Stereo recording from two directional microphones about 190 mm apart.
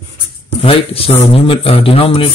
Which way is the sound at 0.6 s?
30° left (ahead or behind).